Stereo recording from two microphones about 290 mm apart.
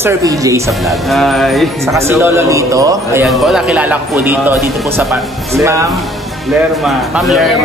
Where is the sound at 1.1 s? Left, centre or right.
Centre.